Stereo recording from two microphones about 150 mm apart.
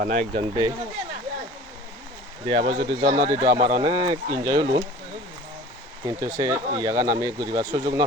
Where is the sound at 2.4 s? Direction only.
35° right (ahead or behind).